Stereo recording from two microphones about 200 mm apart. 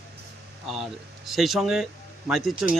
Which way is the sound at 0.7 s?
Centre (ahead or behind).